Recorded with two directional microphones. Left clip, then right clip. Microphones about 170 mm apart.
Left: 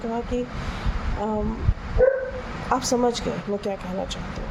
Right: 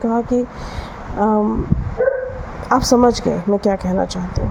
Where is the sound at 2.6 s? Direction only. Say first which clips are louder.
Right 9 dB; 50° right (ahead or behind).